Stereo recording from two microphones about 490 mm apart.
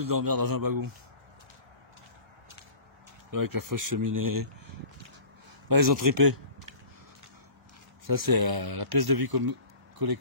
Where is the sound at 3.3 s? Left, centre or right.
Right.